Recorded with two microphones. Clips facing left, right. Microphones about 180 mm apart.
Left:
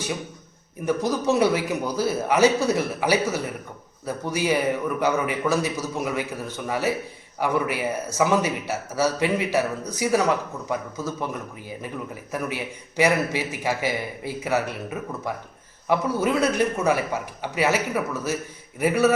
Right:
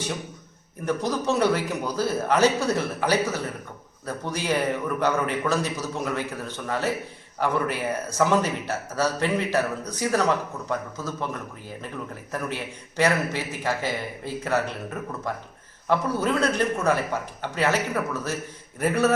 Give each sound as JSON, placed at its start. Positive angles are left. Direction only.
{"t": 0.9, "sound": "speech", "side_deg": 10}
{"t": 12.3, "sound": "speech", "side_deg": 10}